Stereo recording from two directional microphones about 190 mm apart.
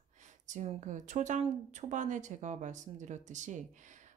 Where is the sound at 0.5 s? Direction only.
40° right (ahead or behind).